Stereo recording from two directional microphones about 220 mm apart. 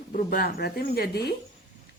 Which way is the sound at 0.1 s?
40° left (ahead or behind).